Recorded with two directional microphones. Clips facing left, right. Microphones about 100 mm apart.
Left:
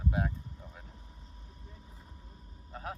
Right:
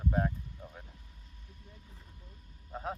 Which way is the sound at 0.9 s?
35° left (ahead or behind).